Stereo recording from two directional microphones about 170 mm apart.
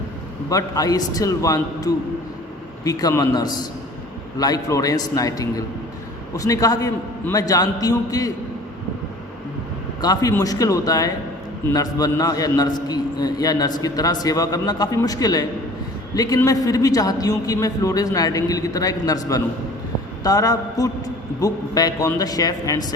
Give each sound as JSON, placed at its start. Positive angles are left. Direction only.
{"t": 0.5, "sound": "a man's voice", "side_deg": 20}
{"t": 10.0, "sound": "a man's voice", "side_deg": 20}